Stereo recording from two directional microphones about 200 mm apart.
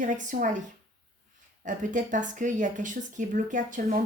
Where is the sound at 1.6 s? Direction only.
40° right (ahead or behind).